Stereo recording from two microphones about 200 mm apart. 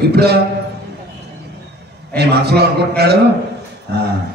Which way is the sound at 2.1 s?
55° right (ahead or behind).